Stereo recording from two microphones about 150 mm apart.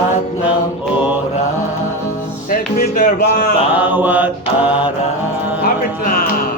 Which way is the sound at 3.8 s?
10° right (ahead or behind).